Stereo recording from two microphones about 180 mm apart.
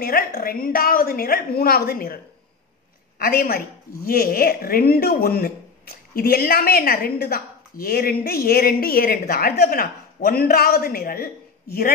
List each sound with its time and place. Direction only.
0.0 s a woman's voice: 55° left (ahead or behind)
3.2 s a woman's voice: 55° left (ahead or behind)